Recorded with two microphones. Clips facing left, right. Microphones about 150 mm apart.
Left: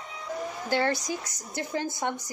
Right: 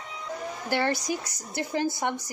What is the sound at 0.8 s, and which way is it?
Speech, 20° left (ahead or behind).